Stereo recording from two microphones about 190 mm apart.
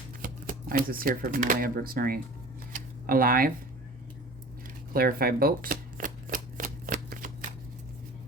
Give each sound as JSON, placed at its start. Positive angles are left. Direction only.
{"t": 0.2, "sound": "speech", "side_deg": -45}
{"t": 2.7, "sound": "tick-tock", "side_deg": -50}
{"t": 4.9, "sound": "shuffling cards", "side_deg": -50}